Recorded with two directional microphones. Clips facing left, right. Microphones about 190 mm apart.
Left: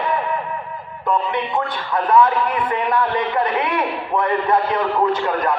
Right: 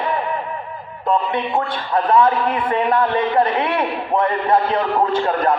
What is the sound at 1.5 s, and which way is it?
A man's voice, 30° right (ahead or behind).